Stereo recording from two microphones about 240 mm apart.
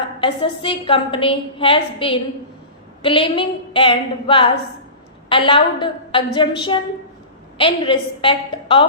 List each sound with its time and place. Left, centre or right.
0.2 s a woman's voice: left